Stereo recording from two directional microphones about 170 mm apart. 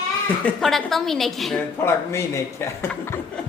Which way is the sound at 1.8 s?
15° left (ahead or behind).